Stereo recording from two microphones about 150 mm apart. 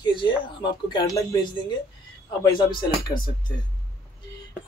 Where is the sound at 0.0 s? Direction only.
30° left (ahead or behind).